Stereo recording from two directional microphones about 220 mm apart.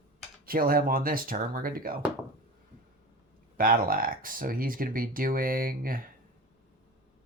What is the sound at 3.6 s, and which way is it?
Speech, 40° right (ahead or behind).